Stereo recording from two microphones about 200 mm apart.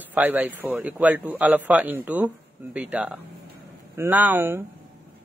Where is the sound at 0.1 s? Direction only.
10° right (ahead or behind).